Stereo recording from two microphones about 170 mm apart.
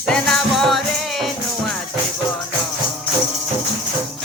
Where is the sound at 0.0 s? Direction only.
Centre (ahead or behind).